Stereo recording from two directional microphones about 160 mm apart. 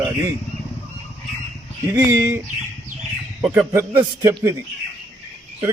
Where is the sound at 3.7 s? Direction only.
20° right (ahead or behind).